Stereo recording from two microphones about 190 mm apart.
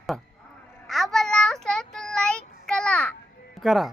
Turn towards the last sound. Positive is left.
turn(degrees=0)  # may be behind; listen again after turning